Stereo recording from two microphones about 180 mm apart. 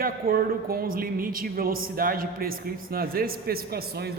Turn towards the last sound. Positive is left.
turn(degrees=-60)  # may be behind; listen again after turning